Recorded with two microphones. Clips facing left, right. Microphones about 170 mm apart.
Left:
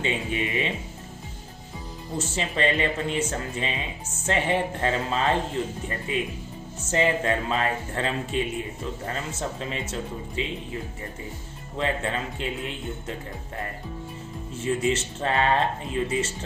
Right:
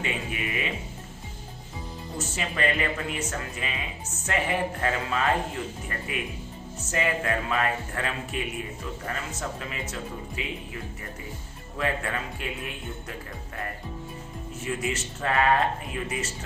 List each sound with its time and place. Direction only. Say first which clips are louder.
0.0 s speech: left 4 dB; 25° left (ahead or behind)
2.1 s speech: left 4 dB; 25° left (ahead or behind)
11.8 s speech: left 2 dB; 25° left (ahead or behind)
14.5 s speech: left 6 dB; 25° left (ahead or behind)